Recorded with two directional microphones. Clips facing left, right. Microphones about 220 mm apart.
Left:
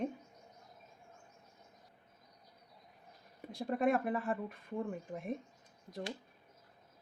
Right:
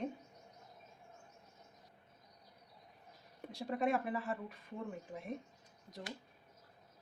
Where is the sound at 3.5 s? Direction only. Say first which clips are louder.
Left 3 dB; 50° left (ahead or behind).